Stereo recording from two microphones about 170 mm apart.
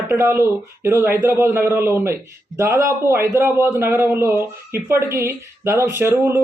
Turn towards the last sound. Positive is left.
turn(degrees=-15)  # may be behind; listen again after turning